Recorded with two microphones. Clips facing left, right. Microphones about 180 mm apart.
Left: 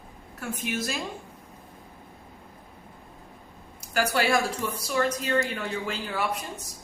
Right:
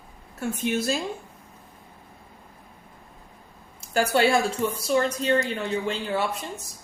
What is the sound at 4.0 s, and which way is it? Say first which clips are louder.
A woman's voice: right 3 dB; 25° right (ahead or behind).